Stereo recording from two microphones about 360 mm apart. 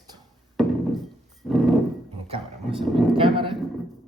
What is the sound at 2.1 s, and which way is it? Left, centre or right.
Speech, centre.